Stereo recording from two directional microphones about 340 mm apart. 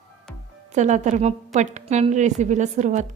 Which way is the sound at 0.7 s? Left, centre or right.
Right.